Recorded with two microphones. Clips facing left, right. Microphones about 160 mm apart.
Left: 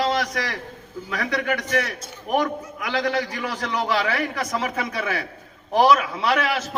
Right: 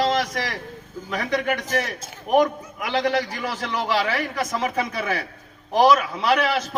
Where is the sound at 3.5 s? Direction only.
10° right (ahead or behind).